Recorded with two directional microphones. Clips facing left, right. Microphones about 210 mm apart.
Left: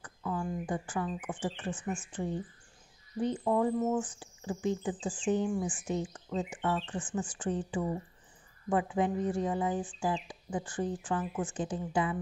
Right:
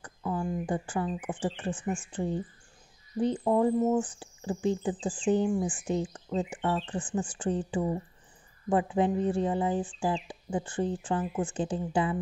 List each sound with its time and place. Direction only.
0.0 s speech: 30° right (ahead or behind)